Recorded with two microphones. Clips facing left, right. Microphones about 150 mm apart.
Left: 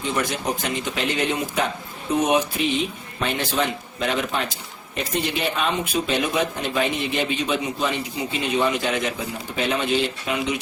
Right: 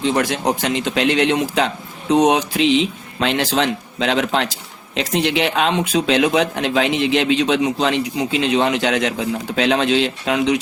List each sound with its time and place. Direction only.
0.0 s a man's voice: 70° right (ahead or behind); by 10.6 s 90° right